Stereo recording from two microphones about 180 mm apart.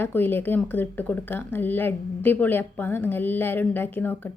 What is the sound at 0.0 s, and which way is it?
Speech, 10° left (ahead or behind).